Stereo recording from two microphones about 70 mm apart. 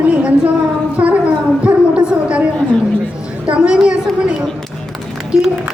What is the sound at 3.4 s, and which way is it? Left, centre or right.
Speech, centre.